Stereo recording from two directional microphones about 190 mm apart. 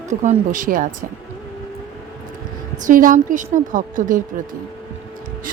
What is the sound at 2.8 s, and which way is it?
Speech, 45° right (ahead or behind).